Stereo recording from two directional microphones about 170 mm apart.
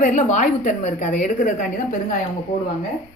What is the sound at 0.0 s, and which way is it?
Speech, 45° left (ahead or behind).